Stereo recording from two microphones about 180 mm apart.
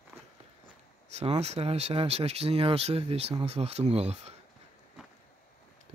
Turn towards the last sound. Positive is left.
turn(degrees=-35)  # may be behind; listen again after turning